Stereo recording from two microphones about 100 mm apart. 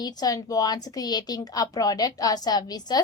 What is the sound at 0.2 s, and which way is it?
A woman's voice, 40° left (ahead or behind).